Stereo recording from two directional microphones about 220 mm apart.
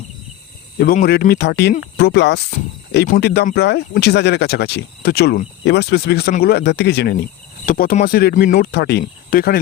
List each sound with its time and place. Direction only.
0.8 s speech: 45° left (ahead or behind)